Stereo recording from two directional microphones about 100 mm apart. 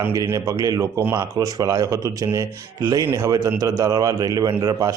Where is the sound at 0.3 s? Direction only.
25° right (ahead or behind).